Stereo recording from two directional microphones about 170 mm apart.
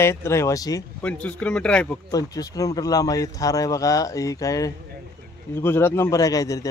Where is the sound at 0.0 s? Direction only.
15° left (ahead or behind).